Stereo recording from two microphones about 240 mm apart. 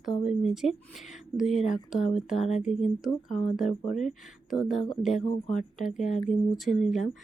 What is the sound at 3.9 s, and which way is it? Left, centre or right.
Speech, left.